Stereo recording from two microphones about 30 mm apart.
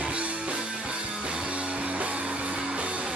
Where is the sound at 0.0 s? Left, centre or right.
Right.